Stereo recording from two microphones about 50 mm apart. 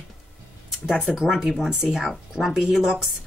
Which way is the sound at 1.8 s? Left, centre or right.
Centre.